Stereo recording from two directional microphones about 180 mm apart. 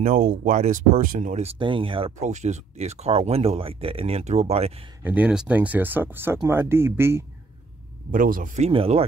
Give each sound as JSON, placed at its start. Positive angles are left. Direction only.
{"t": 0.0, "sound": "speech", "side_deg": -50}
{"t": 5.0, "sound": "speech", "side_deg": -10}
{"t": 8.1, "sound": "speech", "side_deg": -50}